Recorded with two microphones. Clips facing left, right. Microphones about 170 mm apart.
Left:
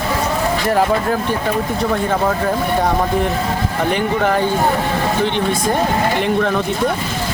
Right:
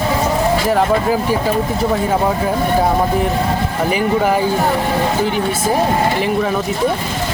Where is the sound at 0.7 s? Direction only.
5° right (ahead or behind).